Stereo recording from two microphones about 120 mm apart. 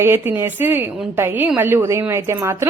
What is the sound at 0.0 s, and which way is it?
A woman's voice, 20° right (ahead or behind).